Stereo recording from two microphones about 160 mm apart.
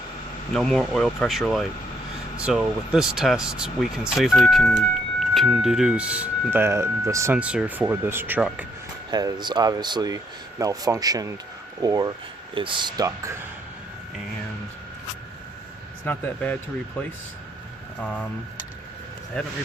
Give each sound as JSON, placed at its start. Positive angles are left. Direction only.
{"t": 0.5, "sound": "speech", "side_deg": 0}
{"t": 9.0, "sound": "speech", "side_deg": -25}
{"t": 16.0, "sound": "a man's voice", "side_deg": 10}
{"t": 18.0, "sound": "a man's voice", "side_deg": 10}